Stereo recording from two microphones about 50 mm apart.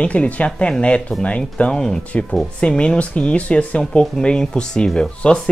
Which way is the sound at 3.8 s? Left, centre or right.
Centre.